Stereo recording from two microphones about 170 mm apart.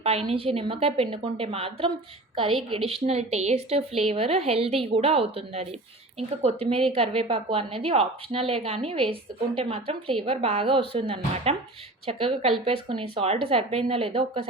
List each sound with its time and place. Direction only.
0.0 s a woman's voice: 35° right (ahead or behind)